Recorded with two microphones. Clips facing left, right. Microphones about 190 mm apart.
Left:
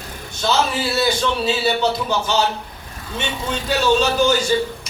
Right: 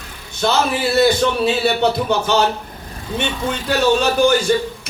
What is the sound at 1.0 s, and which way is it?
A man's voice, 55° right (ahead or behind).